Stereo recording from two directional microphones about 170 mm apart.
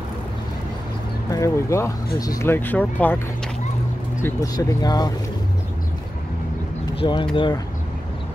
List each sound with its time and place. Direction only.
1.3 s speech: 15° left (ahead or behind)
4.2 s speech: 20° left (ahead or behind)
7.0 s speech: 25° left (ahead or behind)